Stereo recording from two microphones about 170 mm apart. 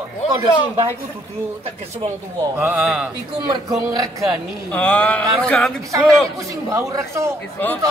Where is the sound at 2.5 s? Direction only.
5° right (ahead or behind).